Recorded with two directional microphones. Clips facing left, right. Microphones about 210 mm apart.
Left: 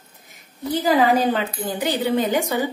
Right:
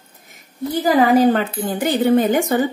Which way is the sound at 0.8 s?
50° right (ahead or behind).